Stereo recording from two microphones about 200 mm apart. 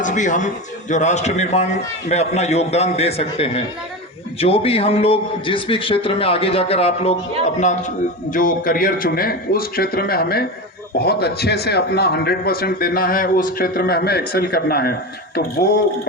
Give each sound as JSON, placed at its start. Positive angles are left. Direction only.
{"t": 0.0, "sound": "a man's voice", "side_deg": 40}